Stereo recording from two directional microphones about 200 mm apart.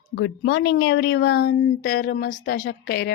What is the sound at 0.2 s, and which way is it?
A woman's voice, 60° left (ahead or behind).